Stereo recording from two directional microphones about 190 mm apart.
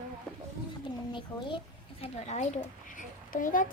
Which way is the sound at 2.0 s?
35° left (ahead or behind).